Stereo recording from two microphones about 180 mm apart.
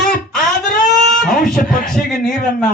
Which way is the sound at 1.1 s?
Centre (ahead or behind).